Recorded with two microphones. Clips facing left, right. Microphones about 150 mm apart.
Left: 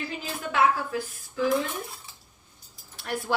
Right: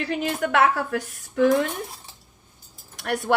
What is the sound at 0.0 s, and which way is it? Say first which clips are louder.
A woman's voice: right 9 dB; 70° right (ahead or behind).